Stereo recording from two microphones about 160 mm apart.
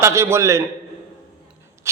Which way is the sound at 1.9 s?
15° right (ahead or behind).